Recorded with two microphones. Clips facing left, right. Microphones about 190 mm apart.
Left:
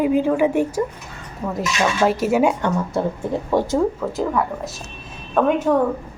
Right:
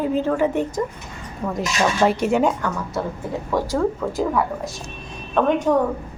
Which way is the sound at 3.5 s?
25° left (ahead or behind).